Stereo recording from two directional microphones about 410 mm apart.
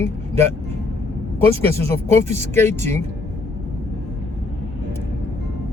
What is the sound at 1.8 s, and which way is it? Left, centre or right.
Speech, centre.